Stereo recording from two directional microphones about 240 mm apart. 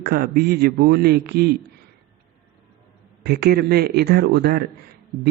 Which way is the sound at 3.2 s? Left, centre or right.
Right.